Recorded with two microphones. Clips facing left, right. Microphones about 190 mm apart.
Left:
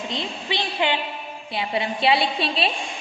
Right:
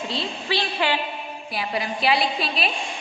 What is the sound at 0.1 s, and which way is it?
A woman's voice, 20° left (ahead or behind).